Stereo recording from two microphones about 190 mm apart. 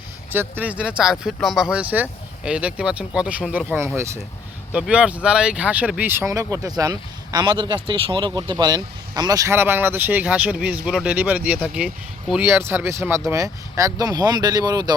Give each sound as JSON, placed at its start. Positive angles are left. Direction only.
{"t": 0.3, "sound": "speech", "side_deg": -10}